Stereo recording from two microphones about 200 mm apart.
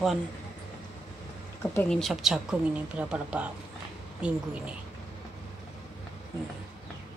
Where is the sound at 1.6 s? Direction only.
5° left (ahead or behind).